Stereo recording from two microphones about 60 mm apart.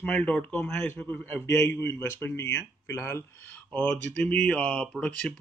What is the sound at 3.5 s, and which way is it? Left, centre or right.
Speech, left.